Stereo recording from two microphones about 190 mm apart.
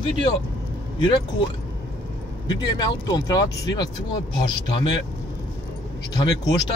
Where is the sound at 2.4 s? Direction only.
20° left (ahead or behind).